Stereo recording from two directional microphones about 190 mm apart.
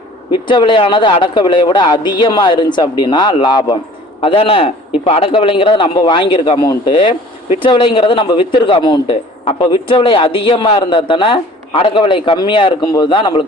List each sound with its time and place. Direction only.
0.4 s a man's voice: 25° left (ahead or behind)